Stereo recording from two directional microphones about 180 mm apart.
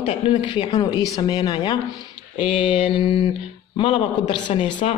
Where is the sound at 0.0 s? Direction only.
30° left (ahead or behind).